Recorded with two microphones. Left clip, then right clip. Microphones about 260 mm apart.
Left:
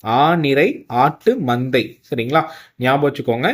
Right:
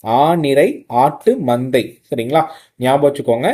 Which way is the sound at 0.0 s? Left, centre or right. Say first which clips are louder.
Right 2 dB; centre.